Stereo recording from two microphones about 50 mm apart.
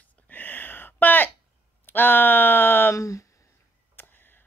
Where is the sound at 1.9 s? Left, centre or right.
Left.